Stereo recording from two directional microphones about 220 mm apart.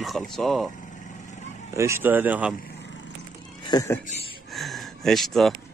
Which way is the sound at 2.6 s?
50° left (ahead or behind).